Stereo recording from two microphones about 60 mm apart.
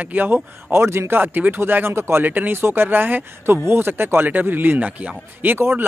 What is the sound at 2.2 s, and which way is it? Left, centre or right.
Speech, right.